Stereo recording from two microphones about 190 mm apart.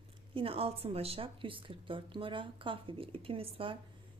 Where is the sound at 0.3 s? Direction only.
30° right (ahead or behind).